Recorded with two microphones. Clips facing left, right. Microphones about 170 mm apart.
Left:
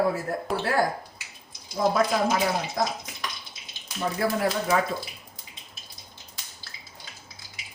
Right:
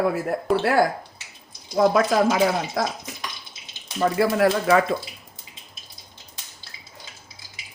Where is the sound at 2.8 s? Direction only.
90° right.